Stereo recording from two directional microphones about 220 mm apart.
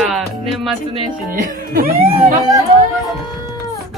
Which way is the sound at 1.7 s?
40° right (ahead or behind).